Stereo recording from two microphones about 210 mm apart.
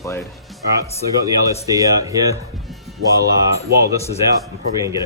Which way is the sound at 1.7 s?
15° right (ahead or behind).